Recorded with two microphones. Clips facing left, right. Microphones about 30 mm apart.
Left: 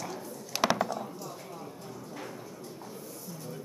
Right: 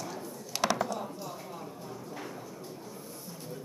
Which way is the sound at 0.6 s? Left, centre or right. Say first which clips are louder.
Left 2 dB; centre.